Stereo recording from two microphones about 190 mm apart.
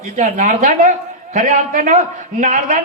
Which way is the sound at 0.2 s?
45° right (ahead or behind).